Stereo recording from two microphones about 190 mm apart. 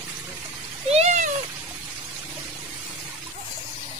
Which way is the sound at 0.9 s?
35° right (ahead or behind).